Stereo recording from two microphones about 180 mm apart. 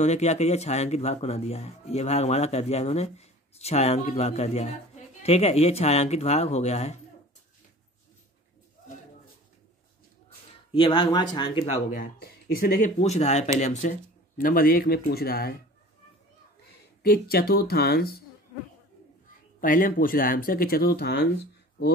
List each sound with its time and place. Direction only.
0.0 s speech: 40° left (ahead or behind)
10.7 s speech: 25° left (ahead or behind)
11.9 s speech: 55° left (ahead or behind); by 13.9 s 40° left (ahead or behind)
14.4 s speech: 55° left (ahead or behind)
17.0 s speech: 60° left (ahead or behind)
19.6 s speech: 50° left (ahead or behind)